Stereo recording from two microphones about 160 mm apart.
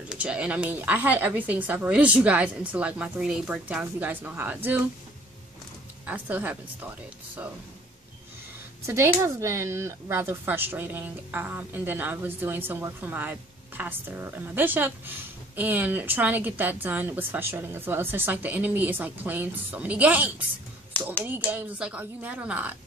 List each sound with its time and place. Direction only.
0.1 s speech: 5° right (ahead or behind)
6.0 s speech: 10° right (ahead or behind)
8.8 s speech: 15° right (ahead or behind)